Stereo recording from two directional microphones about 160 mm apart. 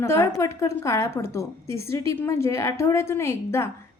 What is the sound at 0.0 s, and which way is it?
A woman's voice, 15° left (ahead or behind).